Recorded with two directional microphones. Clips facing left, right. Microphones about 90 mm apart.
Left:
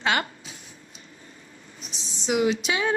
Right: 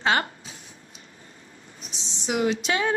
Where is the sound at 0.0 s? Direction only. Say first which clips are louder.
Right 2 dB; 35° right (ahead or behind).